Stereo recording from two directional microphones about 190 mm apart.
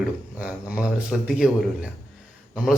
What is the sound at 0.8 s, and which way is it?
Speech, 5° right (ahead or behind).